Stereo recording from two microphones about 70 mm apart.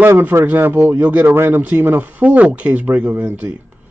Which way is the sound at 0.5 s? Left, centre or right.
Right.